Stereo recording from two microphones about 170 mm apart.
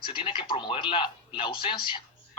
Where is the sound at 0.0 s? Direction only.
30° left (ahead or behind).